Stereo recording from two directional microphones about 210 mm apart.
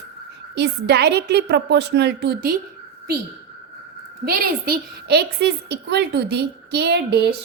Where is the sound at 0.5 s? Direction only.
55° right (ahead or behind).